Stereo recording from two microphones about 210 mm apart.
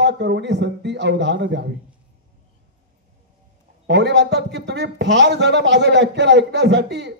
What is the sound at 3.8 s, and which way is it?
A man's voice, 55° right (ahead or behind).